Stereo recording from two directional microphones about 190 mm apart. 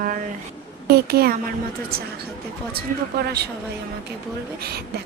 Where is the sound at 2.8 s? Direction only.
55° right (ahead or behind).